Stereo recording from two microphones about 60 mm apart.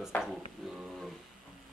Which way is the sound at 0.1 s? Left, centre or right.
Left.